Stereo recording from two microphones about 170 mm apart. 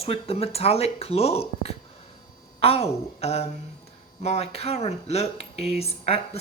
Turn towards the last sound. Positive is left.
turn(degrees=35)  # may be behind; listen again after turning